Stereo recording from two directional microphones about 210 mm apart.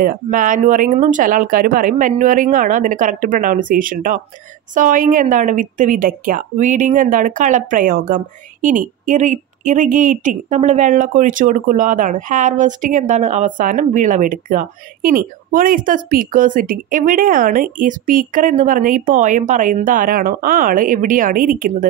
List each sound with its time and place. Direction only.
0.0 s a woman's voice: 40° right (ahead or behind)